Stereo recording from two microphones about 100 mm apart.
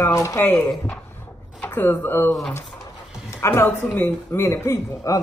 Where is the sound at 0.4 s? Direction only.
20° left (ahead or behind).